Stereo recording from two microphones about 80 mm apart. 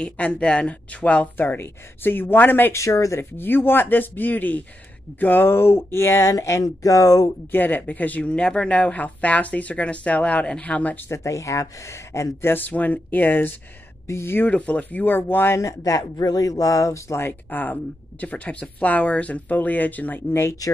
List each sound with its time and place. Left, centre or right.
0.0 s speech: centre
2.7 s speech: left
3.2 s speech: left
7.5 s speech: left
11.1 s speech: left
14.5 s speech: centre
15.6 s speech: left
17.3 s speech: left